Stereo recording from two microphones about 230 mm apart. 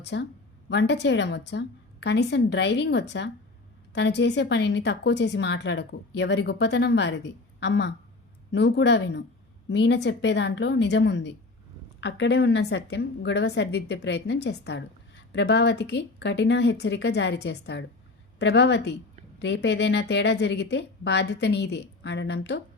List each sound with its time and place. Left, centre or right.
0.0 s a woman's voice: left